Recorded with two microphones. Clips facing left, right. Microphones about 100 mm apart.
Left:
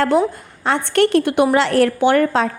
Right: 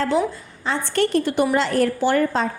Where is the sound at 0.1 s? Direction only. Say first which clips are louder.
Left 4 dB; 50° left (ahead or behind).